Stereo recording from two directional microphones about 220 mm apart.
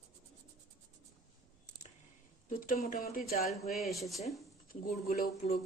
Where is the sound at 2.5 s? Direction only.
40° left (ahead or behind).